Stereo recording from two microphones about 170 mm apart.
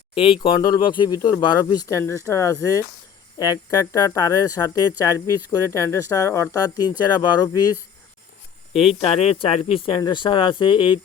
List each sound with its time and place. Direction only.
0.1 s speech: 35° left (ahead or behind)
9.0 s speech: 35° left (ahead or behind)